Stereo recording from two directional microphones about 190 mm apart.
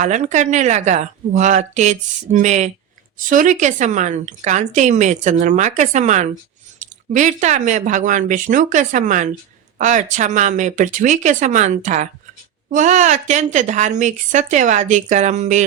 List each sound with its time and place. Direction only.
0.0 s a woman's voice: 40° right (ahead or behind)